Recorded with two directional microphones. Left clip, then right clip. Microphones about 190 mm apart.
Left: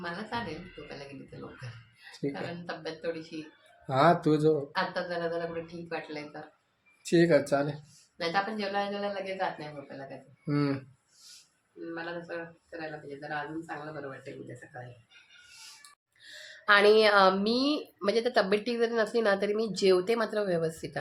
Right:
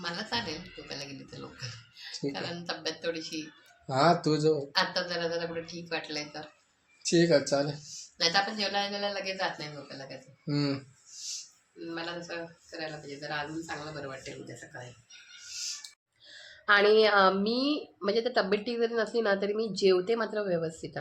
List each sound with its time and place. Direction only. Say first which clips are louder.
0.0 s a sound: right 2 dB; 15° left (ahead or behind)
2.3 s speech: right 2 dB; 15° left (ahead or behind)
7.1 s speech: left 1 dB; centre (ahead or behind)
8.2 s speech: right 3 dB; 15° left (ahead or behind)
11.9 s speech: even; 15° left (ahead or behind)
16.2 s a woman's voice: left 1 dB; 20° left (ahead or behind)